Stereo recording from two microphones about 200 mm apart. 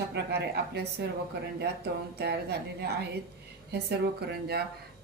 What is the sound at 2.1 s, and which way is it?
Speech, 55° right (ahead or behind).